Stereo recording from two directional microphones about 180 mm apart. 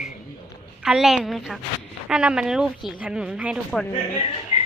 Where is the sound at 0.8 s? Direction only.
5° right (ahead or behind).